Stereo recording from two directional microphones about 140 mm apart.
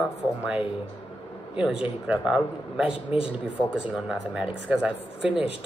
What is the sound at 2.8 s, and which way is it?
Speech, 40° left (ahead or behind).